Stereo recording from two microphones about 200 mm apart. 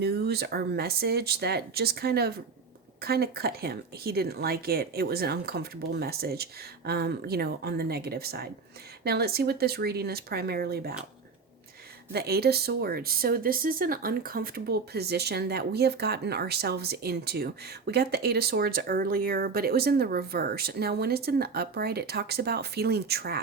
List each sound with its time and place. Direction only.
0.0 s speech: 55° right (ahead or behind)
12.1 s speech: 55° right (ahead or behind)